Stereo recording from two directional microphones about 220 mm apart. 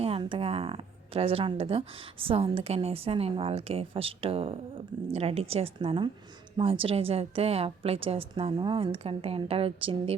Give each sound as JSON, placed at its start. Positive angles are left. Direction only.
{"t": 0.0, "sound": "speech", "side_deg": -25}